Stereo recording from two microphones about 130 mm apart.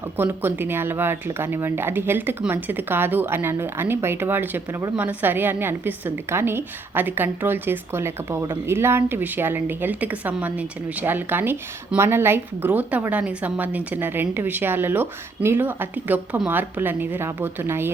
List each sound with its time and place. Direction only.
0.2 s speech: 15° right (ahead or behind)